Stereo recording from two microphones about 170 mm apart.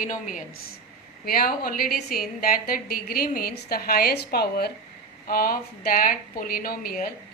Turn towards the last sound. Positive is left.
turn(degrees=60)  # may be behind; listen again after turning